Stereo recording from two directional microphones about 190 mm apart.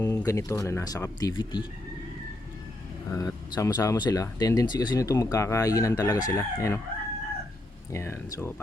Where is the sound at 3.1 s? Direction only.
20° left (ahead or behind).